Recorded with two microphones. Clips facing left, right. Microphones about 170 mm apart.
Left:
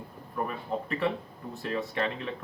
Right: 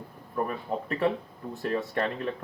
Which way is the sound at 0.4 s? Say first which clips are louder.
Left 1 dB; 45° right (ahead or behind).